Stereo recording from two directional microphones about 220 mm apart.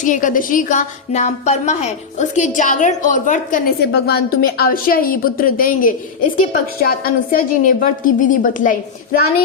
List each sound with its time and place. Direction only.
0.0 s a woman's voice: 35° left (ahead or behind)
3.9 s a woman's voice: 45° left (ahead or behind)